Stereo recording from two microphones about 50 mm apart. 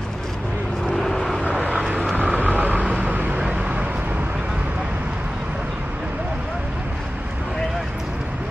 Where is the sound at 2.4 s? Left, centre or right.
Right.